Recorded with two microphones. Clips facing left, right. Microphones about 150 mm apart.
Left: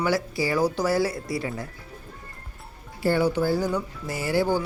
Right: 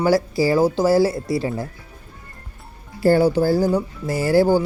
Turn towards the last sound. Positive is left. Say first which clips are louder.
# right 8 dB
turn(degrees=-35)  # may be behind; listen again after turning